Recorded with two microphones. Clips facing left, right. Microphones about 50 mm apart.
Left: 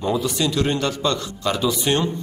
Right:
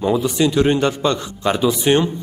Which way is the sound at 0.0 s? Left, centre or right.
Right.